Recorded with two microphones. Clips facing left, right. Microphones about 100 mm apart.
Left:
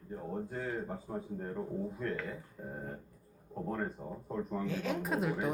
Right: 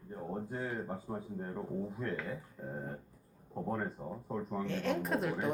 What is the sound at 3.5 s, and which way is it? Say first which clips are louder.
A man's voice: even; 15° right (ahead or behind).